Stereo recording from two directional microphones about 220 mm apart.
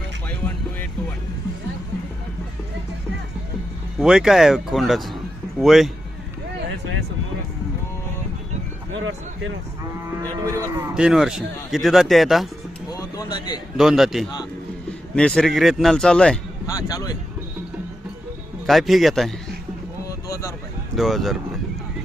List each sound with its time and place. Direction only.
0.3 s music: 5° left (ahead or behind)
3.9 s speech: 5° right (ahead or behind)
10.4 s speech: 10° right (ahead or behind)
12.9 s a sound: 20° left (ahead or behind)
13.7 s speech: centre (ahead or behind)
16.6 s speech: 15° left (ahead or behind)
18.6 s speech: centre (ahead or behind)
20.9 s speech: centre (ahead or behind)